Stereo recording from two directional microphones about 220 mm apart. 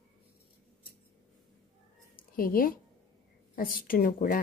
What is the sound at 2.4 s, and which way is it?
Speech, 40° left (ahead or behind).